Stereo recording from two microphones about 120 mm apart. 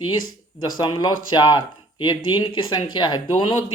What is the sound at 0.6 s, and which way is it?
Speech, 35° left (ahead or behind).